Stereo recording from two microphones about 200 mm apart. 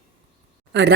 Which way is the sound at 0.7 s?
60° right (ahead or behind).